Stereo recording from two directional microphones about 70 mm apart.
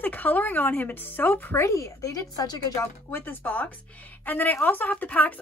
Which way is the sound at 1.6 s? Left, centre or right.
Left.